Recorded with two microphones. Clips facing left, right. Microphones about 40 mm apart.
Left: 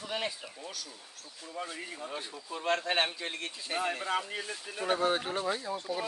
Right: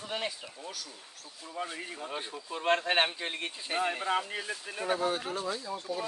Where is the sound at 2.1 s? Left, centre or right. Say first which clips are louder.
Right 2 dB; right.